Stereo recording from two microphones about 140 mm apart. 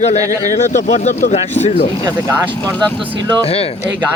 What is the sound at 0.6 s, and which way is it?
Speech, 60° left (ahead or behind).